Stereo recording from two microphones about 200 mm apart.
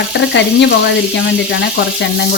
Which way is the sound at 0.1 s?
60° left (ahead or behind).